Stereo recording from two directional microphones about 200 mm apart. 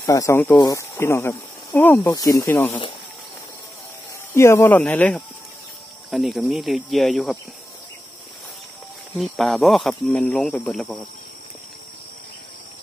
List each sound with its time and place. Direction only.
0.0 s speech: 15° left (ahead or behind)
4.3 s speech: 15° left (ahead or behind)
9.1 s speech: centre (ahead or behind)